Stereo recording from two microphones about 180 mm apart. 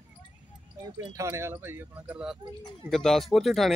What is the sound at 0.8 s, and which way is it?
Speech, 20° right (ahead or behind).